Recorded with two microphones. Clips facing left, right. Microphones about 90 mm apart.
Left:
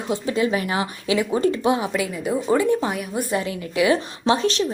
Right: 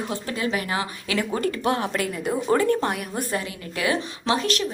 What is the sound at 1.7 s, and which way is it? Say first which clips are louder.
A woman's voice: left 2 dB; 5° left (ahead or behind).